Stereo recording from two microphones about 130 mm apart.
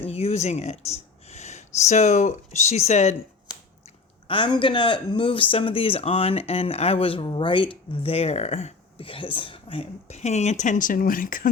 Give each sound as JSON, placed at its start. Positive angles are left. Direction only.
{"t": 0.0, "sound": "speech", "side_deg": 55}
{"t": 4.3, "sound": "speech", "side_deg": 40}
{"t": 9.0, "sound": "speech", "side_deg": 40}